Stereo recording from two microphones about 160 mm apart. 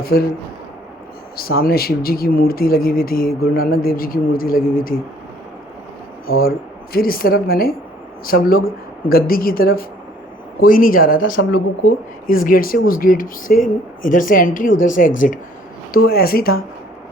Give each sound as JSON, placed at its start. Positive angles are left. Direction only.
{"t": 0.0, "sound": "a man's voice", "side_deg": 70}
{"t": 1.4, "sound": "speech", "side_deg": 70}
{"t": 6.2, "sound": "speech", "side_deg": 70}
{"t": 15.9, "sound": "speech", "side_deg": 70}